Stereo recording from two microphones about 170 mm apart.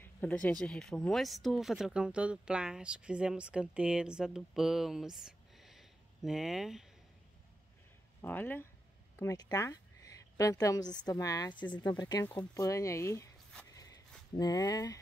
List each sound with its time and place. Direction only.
0.0 s speech: 10° left (ahead or behind)
8.2 s speech: 10° left (ahead or behind)
13.7 s a sound: 20° left (ahead or behind)
14.3 s speech: 20° left (ahead or behind)